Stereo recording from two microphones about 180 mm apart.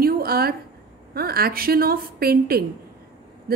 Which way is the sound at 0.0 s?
55° right (ahead or behind).